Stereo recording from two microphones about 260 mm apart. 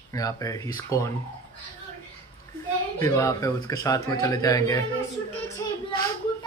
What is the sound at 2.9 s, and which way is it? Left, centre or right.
A man's voice, centre.